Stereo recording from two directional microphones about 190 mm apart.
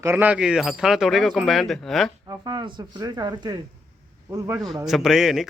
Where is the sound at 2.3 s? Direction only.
25° right (ahead or behind).